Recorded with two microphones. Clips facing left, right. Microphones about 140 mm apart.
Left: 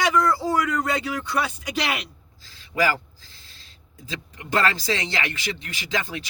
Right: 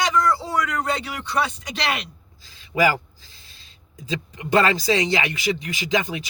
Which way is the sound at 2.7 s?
20° right (ahead or behind).